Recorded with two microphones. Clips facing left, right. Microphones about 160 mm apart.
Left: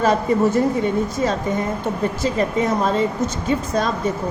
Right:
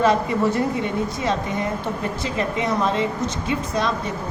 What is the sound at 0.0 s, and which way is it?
A woman's voice, 45° left (ahead or behind).